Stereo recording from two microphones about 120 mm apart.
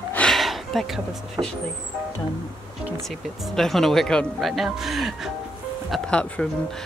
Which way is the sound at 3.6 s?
Centre (ahead or behind).